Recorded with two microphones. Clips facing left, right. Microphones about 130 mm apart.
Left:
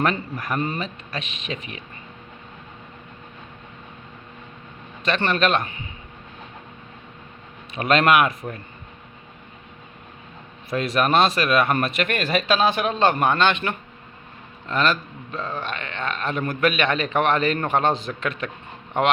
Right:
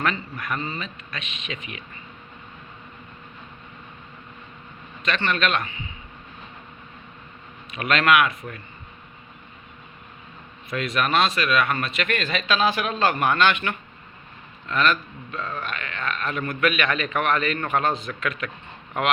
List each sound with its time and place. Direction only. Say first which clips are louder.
0.0 s a man's voice: left 3 dB; 35° left (ahead or behind)
5.0 s a man's voice: left 3 dB; 35° left (ahead or behind)
7.7 s a man's voice: left 2 dB; 35° left (ahead or behind)
10.7 s a man's voice: left 3 dB; 35° left (ahead or behind)
12.5 s a man's voice: left 1 dB; 30° left (ahead or behind)